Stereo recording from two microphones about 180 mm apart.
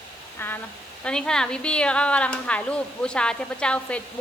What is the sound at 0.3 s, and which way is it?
A woman's voice, 10° left (ahead or behind).